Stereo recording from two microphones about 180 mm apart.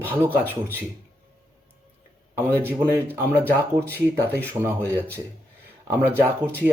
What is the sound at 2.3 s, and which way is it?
Speech, 15° right (ahead or behind).